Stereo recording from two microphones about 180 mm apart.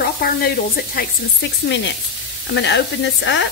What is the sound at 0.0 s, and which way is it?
Sizzle, 60° left (ahead or behind).